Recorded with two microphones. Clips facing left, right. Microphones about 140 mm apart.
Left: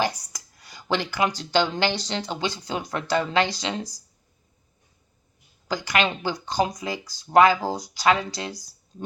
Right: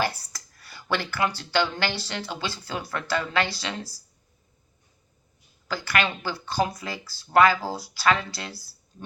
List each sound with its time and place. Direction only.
0.0 s speech: 15° left (ahead or behind)
5.6 s speech: 15° left (ahead or behind)